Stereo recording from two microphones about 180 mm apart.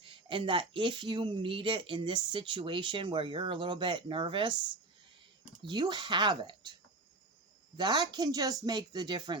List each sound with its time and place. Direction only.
0.0 s speech: 30° right (ahead or behind)
5.6 s speech: 25° right (ahead or behind)
7.8 s speech: 25° right (ahead or behind)